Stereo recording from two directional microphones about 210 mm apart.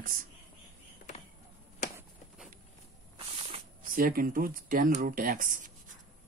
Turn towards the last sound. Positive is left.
turn(degrees=-40)  # may be behind; listen again after turning